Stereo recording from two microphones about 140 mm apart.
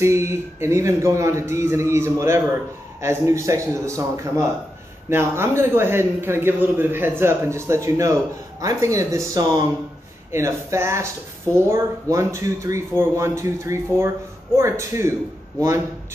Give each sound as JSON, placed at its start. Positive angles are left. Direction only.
{"t": 0.0, "sound": "a man's voice", "side_deg": -20}